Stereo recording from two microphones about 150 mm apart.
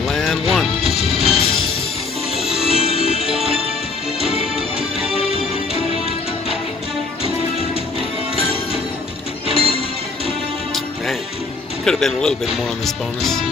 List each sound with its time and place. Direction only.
0.1 s music: centre (ahead or behind)
0.8 s music: 45° left (ahead or behind)
9.5 s music: 40° left (ahead or behind)
11.8 s speech: 5° left (ahead or behind)